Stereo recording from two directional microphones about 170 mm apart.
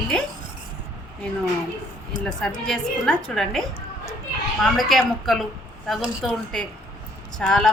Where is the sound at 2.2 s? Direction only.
5° left (ahead or behind).